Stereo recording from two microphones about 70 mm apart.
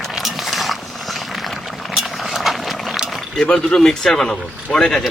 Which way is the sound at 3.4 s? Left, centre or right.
Centre.